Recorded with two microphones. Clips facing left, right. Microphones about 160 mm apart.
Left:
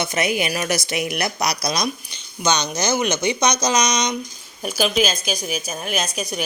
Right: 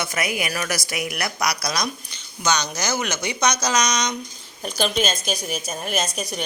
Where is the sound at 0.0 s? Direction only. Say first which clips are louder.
Left 4 dB; 25° left (ahead or behind).